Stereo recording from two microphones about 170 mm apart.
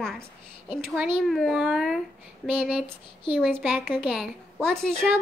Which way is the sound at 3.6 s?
5° left (ahead or behind).